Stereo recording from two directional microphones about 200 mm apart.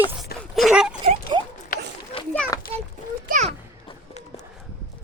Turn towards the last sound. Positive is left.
turn(degrees=-35)  # may be behind; listen again after turning